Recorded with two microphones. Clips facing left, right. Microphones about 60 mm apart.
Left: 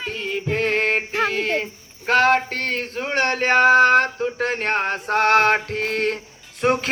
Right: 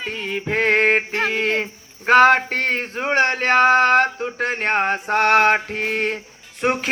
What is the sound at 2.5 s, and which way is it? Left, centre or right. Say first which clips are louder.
Speech: right 3 dB; right.